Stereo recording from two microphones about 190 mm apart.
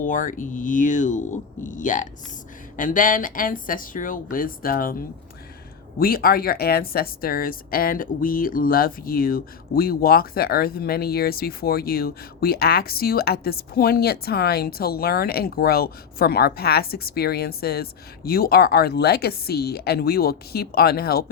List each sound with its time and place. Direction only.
0.0 s a woman's voice: 45° left (ahead or behind)